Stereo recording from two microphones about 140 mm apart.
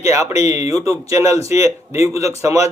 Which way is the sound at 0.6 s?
25° right (ahead or behind).